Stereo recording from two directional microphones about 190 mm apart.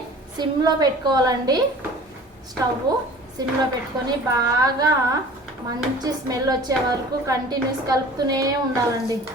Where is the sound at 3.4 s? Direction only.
20° right (ahead or behind).